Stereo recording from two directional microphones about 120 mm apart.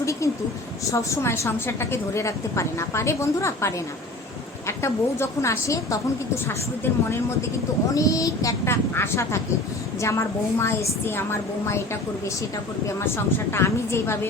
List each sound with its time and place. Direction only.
0.0 s a sound: 25° left (ahead or behind)
0.9 s a woman's voice: 25° left (ahead or behind)
13.5 s a woman's voice: 20° left (ahead or behind)